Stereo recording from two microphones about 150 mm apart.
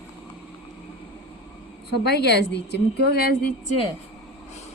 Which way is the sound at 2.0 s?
90° left.